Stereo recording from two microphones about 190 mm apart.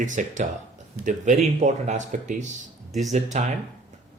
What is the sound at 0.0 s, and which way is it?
Speech, 40° right (ahead or behind).